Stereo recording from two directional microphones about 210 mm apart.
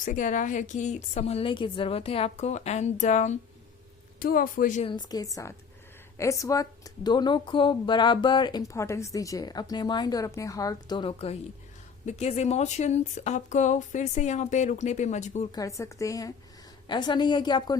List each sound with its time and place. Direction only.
0.0 s speech: 40° left (ahead or behind)
4.9 s a woman's voice: 20° left (ahead or behind)
15.5 s a woman's voice: 15° left (ahead or behind)